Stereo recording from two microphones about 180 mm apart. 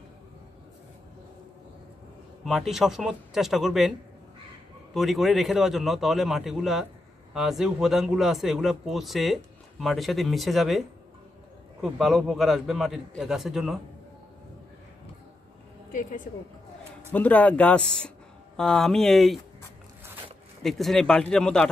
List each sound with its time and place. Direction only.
2.4 s speech: centre (ahead or behind)
4.9 s speech: centre (ahead or behind)
11.8 s speech: centre (ahead or behind)
15.9 s speech: 45° left (ahead or behind)
17.1 s speech: 10° left (ahead or behind)
20.6 s speech: centre (ahead or behind)